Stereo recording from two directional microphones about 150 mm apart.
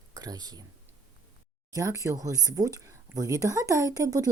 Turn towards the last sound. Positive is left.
turn(degrees=-25)  # may be behind; listen again after turning